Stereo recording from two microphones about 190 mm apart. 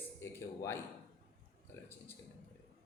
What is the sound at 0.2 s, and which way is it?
Speech, 15° left (ahead or behind).